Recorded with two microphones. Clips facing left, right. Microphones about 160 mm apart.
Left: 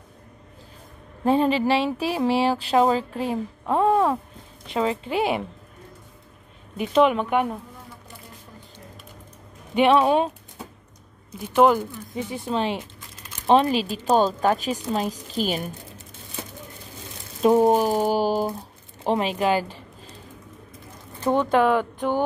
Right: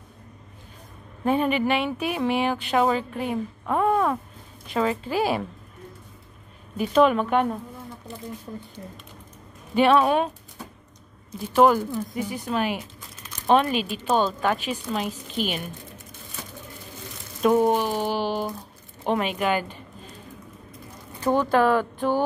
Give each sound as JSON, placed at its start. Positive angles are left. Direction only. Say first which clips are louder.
{"t": 1.2, "sound": "speech", "louder": "left 2 dB", "side_deg": 30}
{"t": 6.8, "sound": "speech", "louder": "even", "side_deg": 20}
{"t": 9.8, "sound": "speech", "louder": "left 1 dB", "side_deg": 20}
{"t": 11.3, "sound": "speech", "louder": "even", "side_deg": 15}
{"t": 17.4, "sound": "speech", "louder": "left 2 dB", "side_deg": 30}
{"t": 19.0, "sound": "speech", "louder": "left 2 dB", "side_deg": 30}
{"t": 21.3, "sound": "speech", "louder": "left 1 dB", "side_deg": 20}